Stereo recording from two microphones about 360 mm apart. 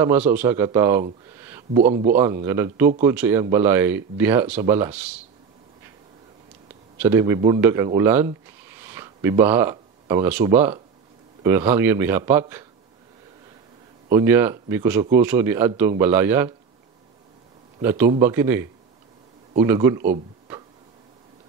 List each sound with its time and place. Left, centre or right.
0.0 s speech: centre
1.4 s a sound: centre
1.8 s speech: centre
2.0 s speech: centre
7.0 s speech: centre
14.1 s speech: centre
17.8 s speech: centre
20.1 s a sound: centre